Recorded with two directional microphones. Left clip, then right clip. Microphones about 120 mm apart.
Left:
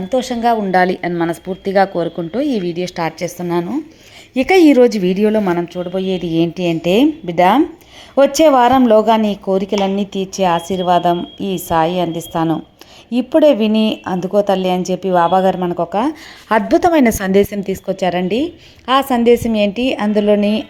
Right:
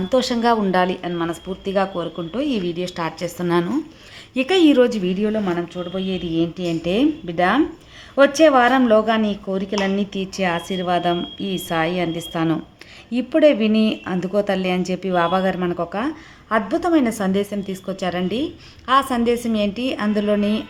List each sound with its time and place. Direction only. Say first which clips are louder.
0.1 s speech: left 3 dB; 10° left (ahead or behind)
0.7 s speech: left 6 dB; 40° left (ahead or behind)
4.4 s speech: left 5 dB; 35° left (ahead or behind)
5.0 s a woman's voice: left 7 dB; 60° left (ahead or behind)
5.5 s a woman's voice: left 6 dB; 50° left (ahead or behind); by 9.7 s 35° left (ahead or behind)
9.8 s a woman's voice: left 5 dB; 25° left (ahead or behind)
16.5 s a woman's voice: left 7 dB; 85° left; by 20.7 s 45° left (ahead or behind)